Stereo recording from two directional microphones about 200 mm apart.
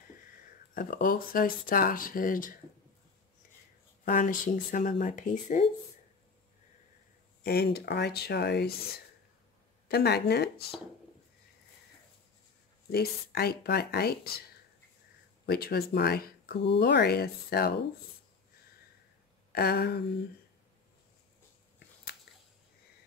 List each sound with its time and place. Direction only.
0.7 s speech: 45° left (ahead or behind)
4.0 s speech: 40° left (ahead or behind)
7.4 s speech: 50° left (ahead or behind)
9.8 s speech: 55° left (ahead or behind)
12.9 s speech: 50° left (ahead or behind)
15.4 s speech: 50° left (ahead or behind)
19.5 s speech: 50° left (ahead or behind)
22.3 s a sound: 55° left (ahead or behind)